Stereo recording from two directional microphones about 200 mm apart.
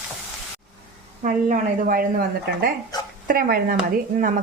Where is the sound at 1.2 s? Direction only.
40° right (ahead or behind).